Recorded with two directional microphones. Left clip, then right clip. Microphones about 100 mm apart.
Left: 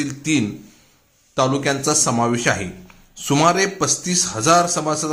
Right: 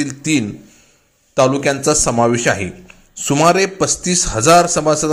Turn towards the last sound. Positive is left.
turn(degrees=-35)  # may be behind; listen again after turning